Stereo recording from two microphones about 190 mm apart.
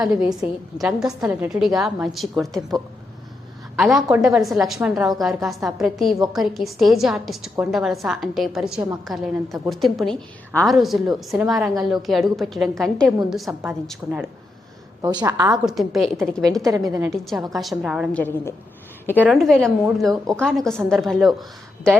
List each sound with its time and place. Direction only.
0.0 s a woman's voice: 5° right (ahead or behind)
3.8 s a woman's voice: centre (ahead or behind)
15.2 s a woman's voice: 15° right (ahead or behind)
15.6 s a woman's voice: centre (ahead or behind)
16.6 s a woman's voice: 15° right (ahead or behind)
17.1 s a woman's voice: centre (ahead or behind)
18.1 s a woman's voice: 10° left (ahead or behind)